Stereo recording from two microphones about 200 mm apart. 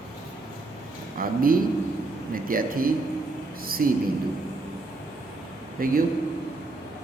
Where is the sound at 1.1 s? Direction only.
45° right (ahead or behind).